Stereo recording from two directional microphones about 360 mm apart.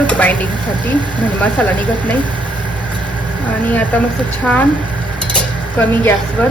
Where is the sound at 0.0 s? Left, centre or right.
Centre.